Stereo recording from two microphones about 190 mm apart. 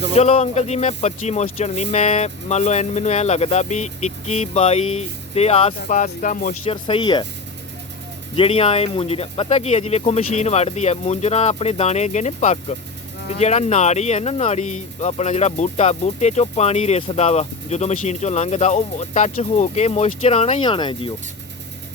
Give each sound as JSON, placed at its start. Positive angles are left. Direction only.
{"t": 0.2, "sound": "speech", "side_deg": 35}
{"t": 6.8, "sound": "speech", "side_deg": 25}
{"t": 8.4, "sound": "speech", "side_deg": 30}